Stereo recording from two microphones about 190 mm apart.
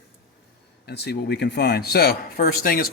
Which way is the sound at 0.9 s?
60° left (ahead or behind).